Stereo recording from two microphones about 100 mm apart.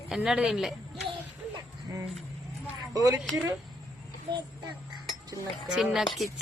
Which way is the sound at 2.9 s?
35° right (ahead or behind).